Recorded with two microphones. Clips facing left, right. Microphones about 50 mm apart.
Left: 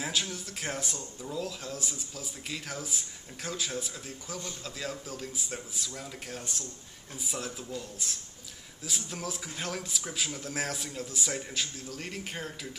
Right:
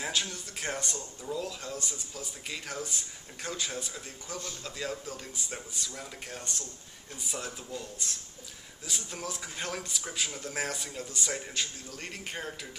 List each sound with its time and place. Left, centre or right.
0.0 s speech: centre